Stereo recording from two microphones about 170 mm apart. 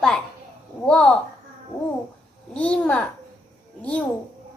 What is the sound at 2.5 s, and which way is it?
Speech, 10° left (ahead or behind).